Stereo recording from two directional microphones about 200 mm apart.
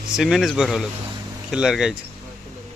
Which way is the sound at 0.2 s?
Centre (ahead or behind).